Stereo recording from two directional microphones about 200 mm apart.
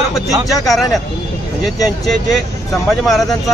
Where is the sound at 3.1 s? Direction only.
Centre (ahead or behind).